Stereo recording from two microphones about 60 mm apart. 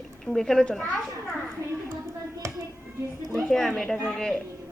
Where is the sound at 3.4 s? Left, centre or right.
Centre.